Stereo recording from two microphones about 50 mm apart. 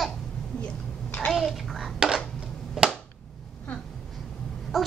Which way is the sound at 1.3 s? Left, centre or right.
Centre.